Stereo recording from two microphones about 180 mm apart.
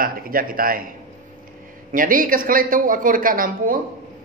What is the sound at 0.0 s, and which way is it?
Speech, 55° right (ahead or behind).